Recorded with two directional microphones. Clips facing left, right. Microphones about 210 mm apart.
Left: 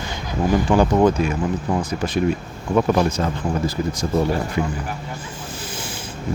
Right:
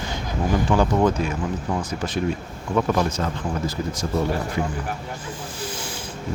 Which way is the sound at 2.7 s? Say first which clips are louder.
Left 4 dB; 20° left (ahead or behind).